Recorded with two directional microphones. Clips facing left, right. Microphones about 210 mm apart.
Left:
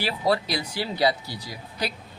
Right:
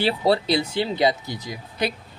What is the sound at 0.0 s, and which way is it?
Speech, 25° right (ahead or behind).